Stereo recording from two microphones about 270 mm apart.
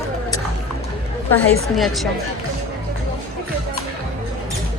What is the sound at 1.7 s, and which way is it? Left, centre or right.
Speech, centre.